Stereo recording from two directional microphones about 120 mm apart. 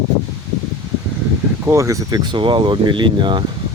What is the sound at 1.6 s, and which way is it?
Speech, 25° right (ahead or behind).